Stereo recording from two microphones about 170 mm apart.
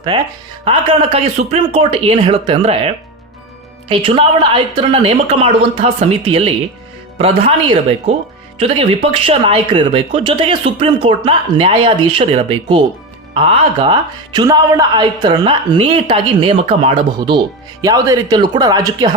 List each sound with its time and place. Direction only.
0.1 s speech: 25° right (ahead or behind)